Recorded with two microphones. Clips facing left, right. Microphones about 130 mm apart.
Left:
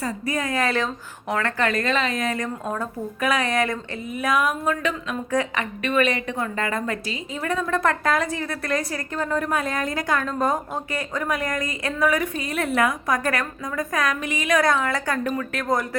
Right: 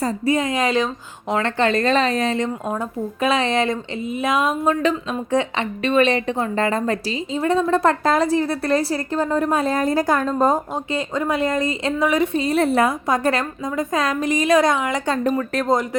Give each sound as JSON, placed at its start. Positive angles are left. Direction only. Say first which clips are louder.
{"t": 0.3, "sound": "a woman's voice", "louder": "right 4 dB", "side_deg": -20}
{"t": 14.6, "sound": "a woman's voice", "louder": "right 2 dB", "side_deg": -20}